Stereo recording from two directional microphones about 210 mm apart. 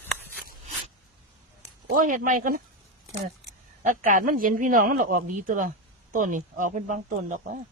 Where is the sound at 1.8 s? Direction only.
40° right (ahead or behind).